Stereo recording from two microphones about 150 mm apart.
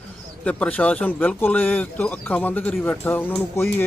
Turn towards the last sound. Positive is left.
turn(degrees=15)  # may be behind; listen again after turning